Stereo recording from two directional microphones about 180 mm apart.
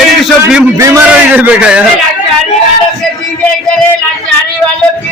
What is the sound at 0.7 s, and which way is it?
A man's voice, 15° right (ahead or behind).